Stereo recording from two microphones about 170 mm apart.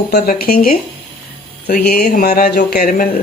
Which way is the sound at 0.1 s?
60° left (ahead or behind).